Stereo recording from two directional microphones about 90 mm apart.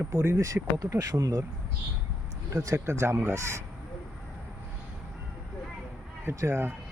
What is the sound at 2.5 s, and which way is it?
Speech, 35° right (ahead or behind).